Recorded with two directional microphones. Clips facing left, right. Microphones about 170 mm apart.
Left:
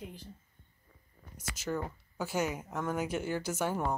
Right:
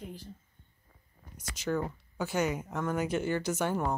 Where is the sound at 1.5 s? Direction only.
5° left (ahead or behind).